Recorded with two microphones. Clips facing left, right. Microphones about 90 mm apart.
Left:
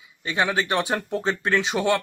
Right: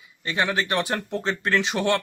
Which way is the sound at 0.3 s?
15° left (ahead or behind).